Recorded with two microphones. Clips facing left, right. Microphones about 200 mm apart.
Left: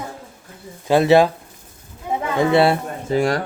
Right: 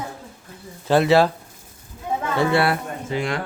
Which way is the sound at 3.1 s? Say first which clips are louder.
Left 7 dB; 40° left (ahead or behind).